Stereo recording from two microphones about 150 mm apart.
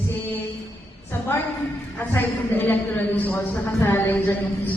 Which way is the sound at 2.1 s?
10° left (ahead or behind).